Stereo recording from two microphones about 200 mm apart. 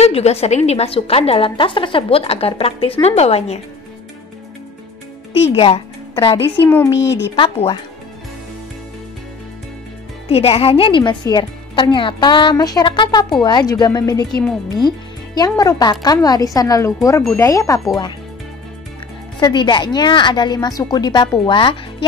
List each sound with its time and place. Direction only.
0.0 s a woman's voice: 30° left (ahead or behind)
5.4 s speech: 25° left (ahead or behind)
6.3 s speech: 10° left (ahead or behind)
7.3 s a woman's voice: 30° left (ahead or behind)
10.2 s a woman's voice: 30° left (ahead or behind)
19.4 s a woman's voice: 20° left (ahead or behind)